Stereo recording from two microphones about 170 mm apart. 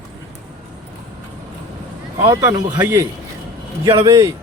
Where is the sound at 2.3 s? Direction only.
20° right (ahead or behind).